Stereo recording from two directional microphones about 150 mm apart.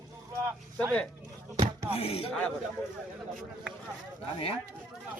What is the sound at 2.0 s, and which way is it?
Speech, 40° left (ahead or behind).